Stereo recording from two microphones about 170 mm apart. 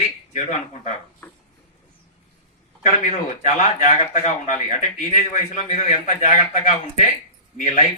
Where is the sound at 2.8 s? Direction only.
45° left (ahead or behind).